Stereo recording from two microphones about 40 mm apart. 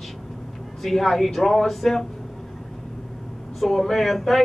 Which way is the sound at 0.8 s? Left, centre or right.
Centre.